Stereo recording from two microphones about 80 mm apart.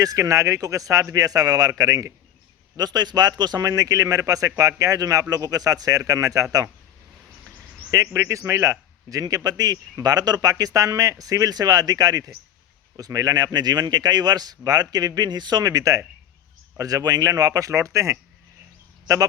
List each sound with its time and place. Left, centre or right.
0.0 s a man's voice: right
8.0 s a man's voice: right